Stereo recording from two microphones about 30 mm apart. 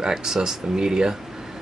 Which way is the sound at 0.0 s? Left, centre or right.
Right.